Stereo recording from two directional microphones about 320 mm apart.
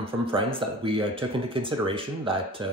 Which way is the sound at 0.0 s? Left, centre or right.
Centre.